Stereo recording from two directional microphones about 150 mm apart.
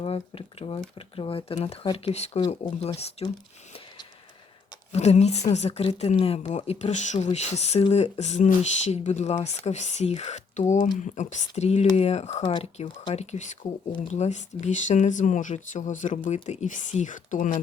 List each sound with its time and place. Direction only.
0.0 s a woman's voice: 40° left (ahead or behind)
4.9 s a woman's voice: 45° left (ahead or behind)
12.4 s speech: 30° left (ahead or behind)
12.7 s a woman's voice: 40° left (ahead or behind); by 17.6 s 60° left (ahead or behind)